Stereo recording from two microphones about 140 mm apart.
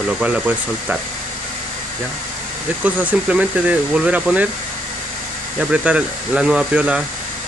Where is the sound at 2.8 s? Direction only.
10° right (ahead or behind).